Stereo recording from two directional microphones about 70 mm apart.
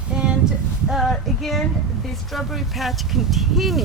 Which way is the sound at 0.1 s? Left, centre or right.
Centre.